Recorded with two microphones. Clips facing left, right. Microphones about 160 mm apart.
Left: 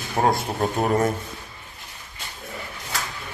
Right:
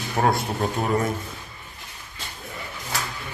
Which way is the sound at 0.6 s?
40° left (ahead or behind).